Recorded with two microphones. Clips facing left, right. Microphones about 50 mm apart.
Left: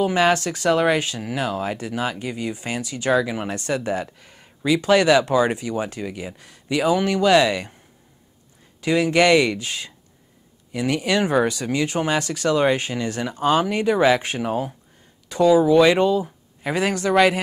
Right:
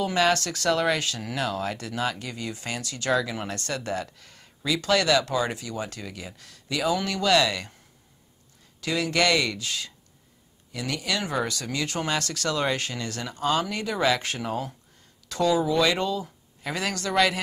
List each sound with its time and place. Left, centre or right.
0.0 s speech: centre
8.8 s speech: left
15.8 s speech: left